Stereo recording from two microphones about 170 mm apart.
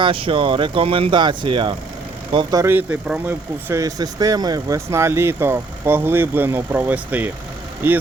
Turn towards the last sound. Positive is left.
turn(degrees=-10)  # may be behind; listen again after turning